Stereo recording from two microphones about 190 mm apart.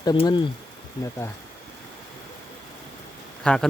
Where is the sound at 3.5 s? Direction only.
5° left (ahead or behind).